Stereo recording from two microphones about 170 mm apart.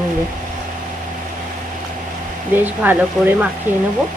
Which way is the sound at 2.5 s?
10° right (ahead or behind).